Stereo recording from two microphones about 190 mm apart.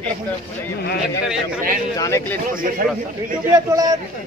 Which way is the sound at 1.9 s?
15° left (ahead or behind).